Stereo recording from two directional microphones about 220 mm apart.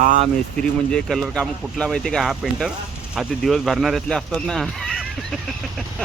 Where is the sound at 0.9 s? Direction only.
Centre (ahead or behind).